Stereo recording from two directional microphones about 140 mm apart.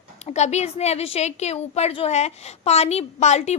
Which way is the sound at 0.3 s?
55° left (ahead or behind).